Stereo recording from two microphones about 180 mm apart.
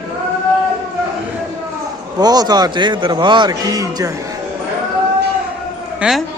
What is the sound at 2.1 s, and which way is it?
A man's voice, 20° right (ahead or behind).